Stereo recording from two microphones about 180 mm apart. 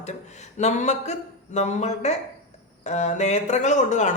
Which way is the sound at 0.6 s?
40° left (ahead or behind).